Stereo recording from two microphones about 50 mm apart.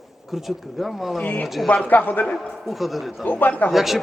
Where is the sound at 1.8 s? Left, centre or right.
Left.